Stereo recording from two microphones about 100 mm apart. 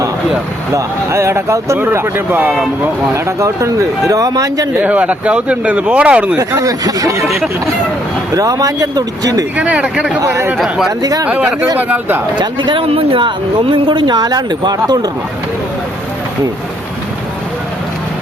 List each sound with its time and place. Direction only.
0.7 s speech: 30° right (ahead or behind)
3.2 s a man's voice: 30° right (ahead or behind)
4.8 s speech: 15° right (ahead or behind)
6.6 s a man's voice: 35° right (ahead or behind)
8.3 s a man's voice: 35° right (ahead or behind)
9.6 s speech: 15° right (ahead or behind)
10.2 s speech: 30° right (ahead or behind)
10.6 s speech: 5° right (ahead or behind)
11.0 s a man's voice: 35° right (ahead or behind)
11.3 s speech: 15° right (ahead or behind)
12.4 s speech: 50° right (ahead or behind)